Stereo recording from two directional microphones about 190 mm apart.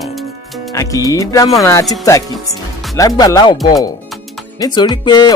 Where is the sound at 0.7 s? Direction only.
15° left (ahead or behind).